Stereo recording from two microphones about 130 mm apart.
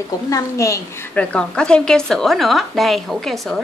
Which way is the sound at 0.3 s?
25° left (ahead or behind).